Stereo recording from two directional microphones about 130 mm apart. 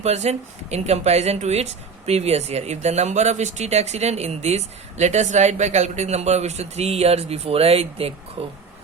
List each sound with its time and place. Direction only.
0.0 s speech: 60° right (ahead or behind)